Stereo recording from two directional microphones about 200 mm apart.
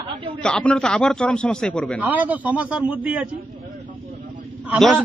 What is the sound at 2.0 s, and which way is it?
Speech, 10° right (ahead or behind).